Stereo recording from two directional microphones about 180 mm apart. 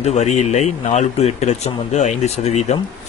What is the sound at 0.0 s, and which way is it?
Speech, 40° left (ahead or behind).